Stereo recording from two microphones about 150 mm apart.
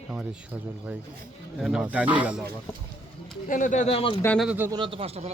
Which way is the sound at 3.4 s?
60° left (ahead or behind).